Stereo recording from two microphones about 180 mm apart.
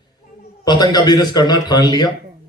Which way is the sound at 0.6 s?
25° left (ahead or behind).